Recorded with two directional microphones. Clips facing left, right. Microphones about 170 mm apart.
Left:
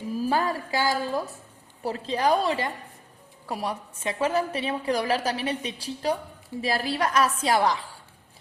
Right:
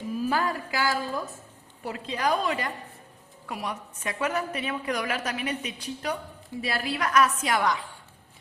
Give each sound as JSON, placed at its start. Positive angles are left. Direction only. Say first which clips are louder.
{"t": 0.2, "sound": "a woman's voice", "louder": "left 2 dB", "side_deg": 30}